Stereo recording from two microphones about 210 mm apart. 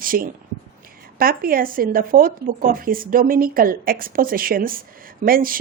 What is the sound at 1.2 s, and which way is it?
Speech, 45° right (ahead or behind).